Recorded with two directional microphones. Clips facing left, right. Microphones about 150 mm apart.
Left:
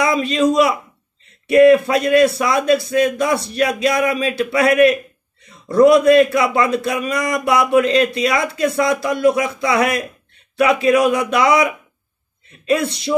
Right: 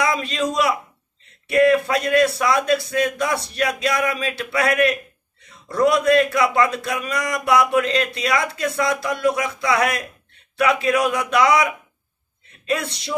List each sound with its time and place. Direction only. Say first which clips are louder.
0.0 s a man's voice: left 6 dB; 10° left (ahead or behind)
12.6 s a man's voice: left 6 dB; 10° left (ahead or behind)